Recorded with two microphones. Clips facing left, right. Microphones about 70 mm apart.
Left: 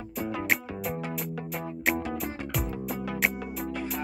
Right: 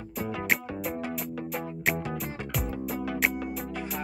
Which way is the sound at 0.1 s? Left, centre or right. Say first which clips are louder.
Even; centre.